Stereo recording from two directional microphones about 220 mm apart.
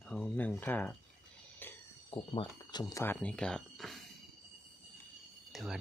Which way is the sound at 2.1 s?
20° left (ahead or behind).